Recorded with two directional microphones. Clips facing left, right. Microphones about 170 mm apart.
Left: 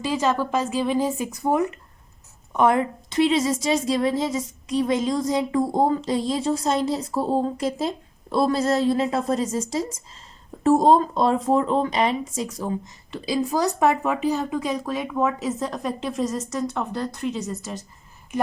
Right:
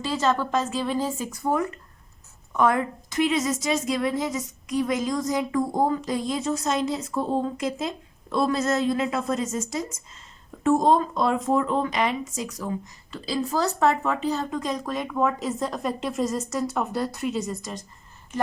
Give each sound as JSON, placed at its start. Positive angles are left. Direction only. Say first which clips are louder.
{"t": 0.0, "sound": "a woman's voice", "louder": "left 1 dB", "side_deg": 10}